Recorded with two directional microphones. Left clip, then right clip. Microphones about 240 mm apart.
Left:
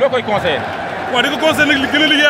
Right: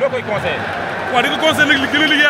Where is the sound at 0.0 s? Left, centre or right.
Left.